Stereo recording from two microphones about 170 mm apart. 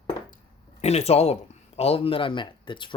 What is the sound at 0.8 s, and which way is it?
Speech, 40° left (ahead or behind).